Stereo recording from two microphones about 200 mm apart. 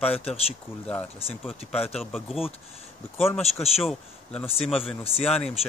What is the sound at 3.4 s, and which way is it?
Speech, 30° left (ahead or behind).